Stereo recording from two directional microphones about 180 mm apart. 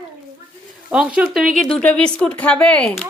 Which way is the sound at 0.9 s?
5° right (ahead or behind).